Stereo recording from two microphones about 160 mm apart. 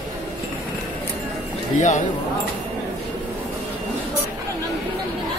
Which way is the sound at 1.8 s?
50° left (ahead or behind).